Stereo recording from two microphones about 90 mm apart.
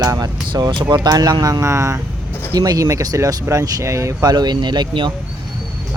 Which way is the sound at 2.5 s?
45° right (ahead or behind).